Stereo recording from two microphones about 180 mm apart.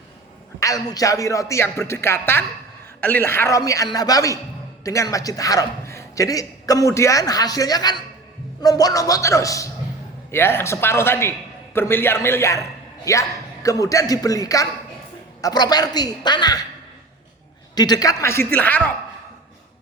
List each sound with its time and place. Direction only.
0.6 s a man's voice: 20° left (ahead or behind)
17.7 s a man's voice: 20° left (ahead or behind)